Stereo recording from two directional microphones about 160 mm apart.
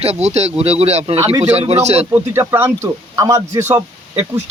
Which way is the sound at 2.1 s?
15° right (ahead or behind).